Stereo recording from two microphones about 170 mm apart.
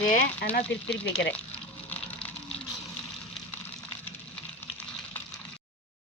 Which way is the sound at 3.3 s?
5° left (ahead or behind).